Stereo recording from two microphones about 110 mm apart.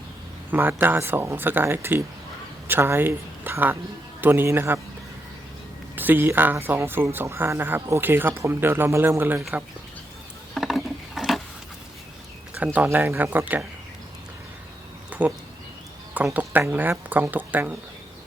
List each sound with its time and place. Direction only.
0.5 s speech: 20° right (ahead or behind)
6.0 s speech: 20° right (ahead or behind)
10.5 s a sound: centre (ahead or behind)
12.5 s speech: 15° right (ahead or behind)
15.1 s a sound: 15° right (ahead or behind)
16.1 s speech: 15° right (ahead or behind)